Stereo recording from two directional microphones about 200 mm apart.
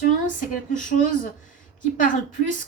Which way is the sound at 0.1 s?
40° left (ahead or behind).